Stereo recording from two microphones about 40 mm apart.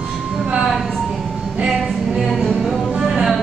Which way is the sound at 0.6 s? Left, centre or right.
Centre.